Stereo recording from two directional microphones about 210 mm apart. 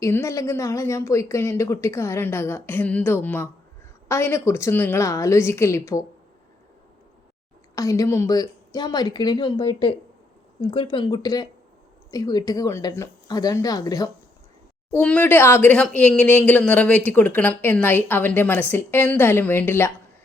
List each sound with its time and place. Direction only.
0.0 s speech: 15° left (ahead or behind)
7.8 s a woman's voice: 15° left (ahead or behind)
14.9 s speech: 5° left (ahead or behind)